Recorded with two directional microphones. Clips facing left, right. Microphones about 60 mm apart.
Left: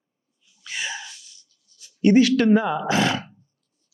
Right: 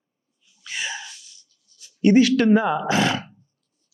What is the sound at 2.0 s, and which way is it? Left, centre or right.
Speech, centre.